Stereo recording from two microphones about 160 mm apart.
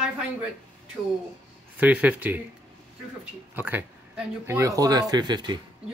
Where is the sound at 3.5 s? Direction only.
10° right (ahead or behind); by 5.6 s 25° right (ahead or behind).